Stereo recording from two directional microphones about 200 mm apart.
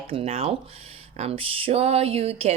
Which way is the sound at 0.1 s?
30° right (ahead or behind).